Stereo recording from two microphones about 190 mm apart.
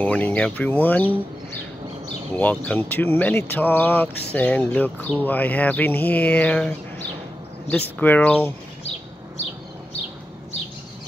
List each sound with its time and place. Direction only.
0.0 s speech: 10° left (ahead or behind)
2.3 s speech: 5° left (ahead or behind)